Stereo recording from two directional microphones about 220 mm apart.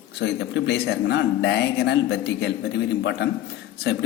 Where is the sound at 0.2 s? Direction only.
55° left (ahead or behind).